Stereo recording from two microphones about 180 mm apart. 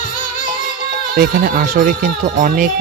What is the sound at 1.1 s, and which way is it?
Speech, 55° right (ahead or behind).